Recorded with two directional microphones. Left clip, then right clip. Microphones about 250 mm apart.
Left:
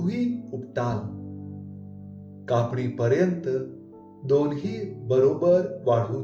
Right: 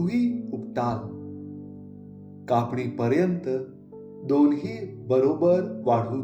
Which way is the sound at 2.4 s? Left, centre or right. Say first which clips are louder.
Right 1 dB; right.